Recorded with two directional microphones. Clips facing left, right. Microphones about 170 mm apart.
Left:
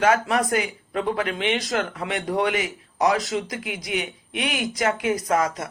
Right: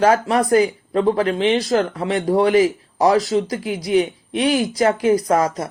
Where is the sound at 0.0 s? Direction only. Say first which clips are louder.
Right 4 dB; 30° right (ahead or behind).